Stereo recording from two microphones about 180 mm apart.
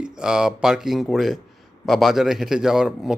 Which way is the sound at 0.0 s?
5° right (ahead or behind).